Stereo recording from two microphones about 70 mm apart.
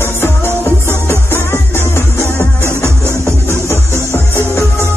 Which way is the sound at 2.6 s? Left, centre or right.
Right.